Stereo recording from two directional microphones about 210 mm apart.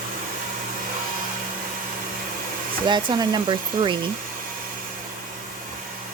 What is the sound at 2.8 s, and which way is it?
Speech, 20° right (ahead or behind).